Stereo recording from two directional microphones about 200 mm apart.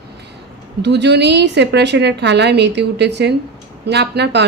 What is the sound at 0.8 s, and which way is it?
A woman's voice, 60° right (ahead or behind).